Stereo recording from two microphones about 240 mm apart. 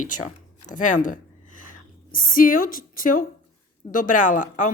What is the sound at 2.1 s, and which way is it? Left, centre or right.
Speech, left.